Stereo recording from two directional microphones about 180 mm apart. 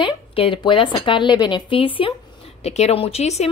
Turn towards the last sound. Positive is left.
turn(degrees=35)  # may be behind; listen again after turning